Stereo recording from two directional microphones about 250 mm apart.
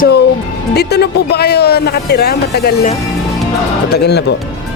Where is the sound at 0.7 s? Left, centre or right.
Left.